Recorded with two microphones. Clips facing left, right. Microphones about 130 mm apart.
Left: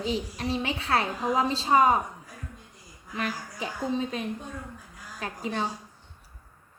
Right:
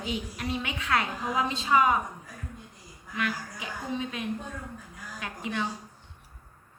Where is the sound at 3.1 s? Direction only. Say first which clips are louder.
Even; 35° left (ahead or behind).